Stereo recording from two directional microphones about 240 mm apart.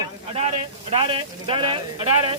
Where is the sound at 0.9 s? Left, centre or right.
Right.